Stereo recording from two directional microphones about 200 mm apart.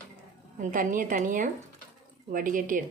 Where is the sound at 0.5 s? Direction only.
40° right (ahead or behind).